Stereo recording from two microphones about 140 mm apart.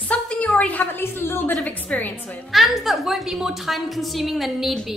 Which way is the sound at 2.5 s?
Centre (ahead or behind).